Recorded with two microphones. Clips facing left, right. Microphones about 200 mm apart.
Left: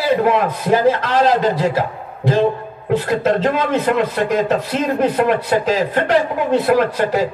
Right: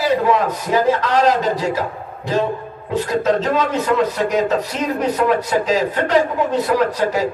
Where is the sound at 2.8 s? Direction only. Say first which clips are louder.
Left 2 dB; 65° left (ahead or behind).